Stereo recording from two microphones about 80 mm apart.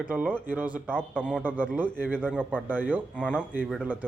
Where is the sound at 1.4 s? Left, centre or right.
Right.